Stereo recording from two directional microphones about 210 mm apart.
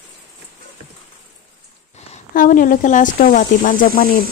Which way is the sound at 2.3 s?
40° left (ahead or behind).